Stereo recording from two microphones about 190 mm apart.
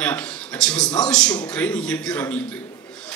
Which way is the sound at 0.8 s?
20° left (ahead or behind).